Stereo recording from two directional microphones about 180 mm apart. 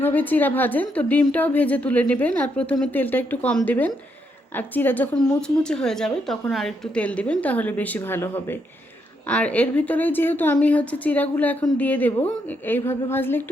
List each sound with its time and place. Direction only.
0.0 s a woman's voice: 10° left (ahead or behind)